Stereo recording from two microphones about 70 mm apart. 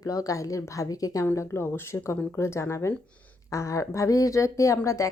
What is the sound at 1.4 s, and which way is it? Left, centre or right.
A woman's voice, left.